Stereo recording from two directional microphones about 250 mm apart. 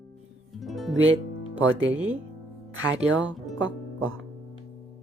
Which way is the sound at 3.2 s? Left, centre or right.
Centre.